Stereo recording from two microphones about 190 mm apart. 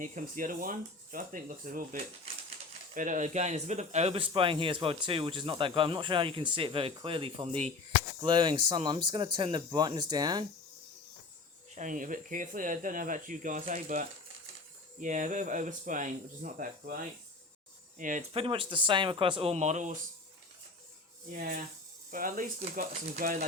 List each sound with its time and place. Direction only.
0.0 s speech: 40° right (ahead or behind); by 10.4 s 20° right (ahead or behind)
11.7 s speech: 40° right (ahead or behind)
21.3 s speech: 50° right (ahead or behind)